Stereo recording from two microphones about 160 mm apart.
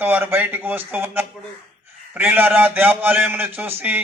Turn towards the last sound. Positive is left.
turn(degrees=-10)  # may be behind; listen again after turning